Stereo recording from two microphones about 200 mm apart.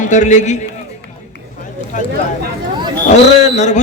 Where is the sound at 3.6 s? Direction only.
35° left (ahead or behind).